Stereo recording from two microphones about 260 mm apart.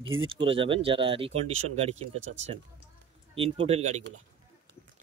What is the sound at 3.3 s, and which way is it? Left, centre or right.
Speech, right.